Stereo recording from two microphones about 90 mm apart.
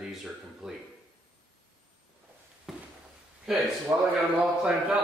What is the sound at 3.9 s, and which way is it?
Speech, 20° right (ahead or behind).